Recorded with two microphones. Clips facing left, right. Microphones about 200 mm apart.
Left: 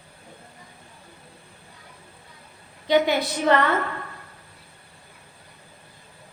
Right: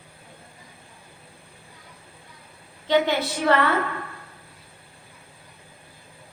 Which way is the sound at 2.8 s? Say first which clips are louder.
Left 1 dB; 15° left (ahead or behind).